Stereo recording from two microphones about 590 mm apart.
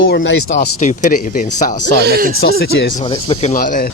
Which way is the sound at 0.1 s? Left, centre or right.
Centre.